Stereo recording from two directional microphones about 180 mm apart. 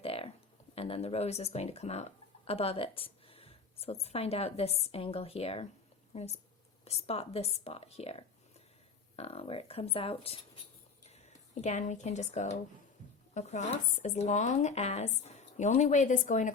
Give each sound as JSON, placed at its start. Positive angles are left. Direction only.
{"t": 0.0, "sound": "a sound", "side_deg": 30}
{"t": 0.8, "sound": "speech", "side_deg": 35}
{"t": 11.6, "sound": "speech", "side_deg": 40}